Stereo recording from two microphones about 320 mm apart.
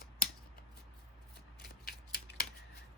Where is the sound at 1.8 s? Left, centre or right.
Left.